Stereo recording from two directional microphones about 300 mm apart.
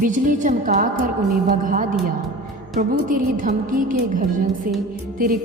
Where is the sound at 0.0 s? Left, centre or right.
Right.